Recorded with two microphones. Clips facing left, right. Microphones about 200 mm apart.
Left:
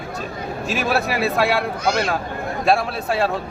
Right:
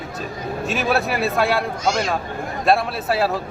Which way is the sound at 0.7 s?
Centre (ahead or behind).